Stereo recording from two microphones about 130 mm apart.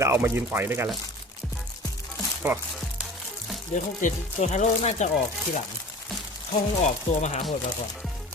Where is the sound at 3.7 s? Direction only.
70° left (ahead or behind).